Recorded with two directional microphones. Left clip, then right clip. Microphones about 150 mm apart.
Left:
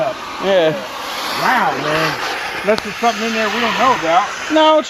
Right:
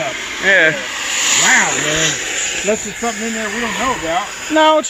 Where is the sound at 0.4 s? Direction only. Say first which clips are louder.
Right 2 dB; 25° left (ahead or behind).